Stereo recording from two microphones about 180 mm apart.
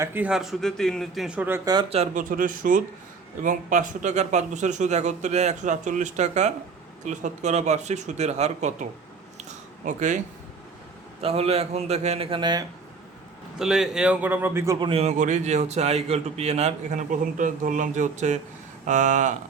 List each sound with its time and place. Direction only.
0.0 s speech: 10° right (ahead or behind)
1.7 s a man's voice: 35° right (ahead or behind)
2.3 s a man's voice: 50° right (ahead or behind)
9.4 s a sound: 40° right (ahead or behind)
11.2 s a man's voice: 35° right (ahead or behind)
13.6 s a man's voice: 5° right (ahead or behind)
14.8 s a man's voice: 35° right (ahead or behind)